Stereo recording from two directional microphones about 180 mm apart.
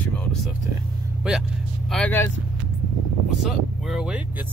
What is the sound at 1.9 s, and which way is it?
Speech, 5° left (ahead or behind).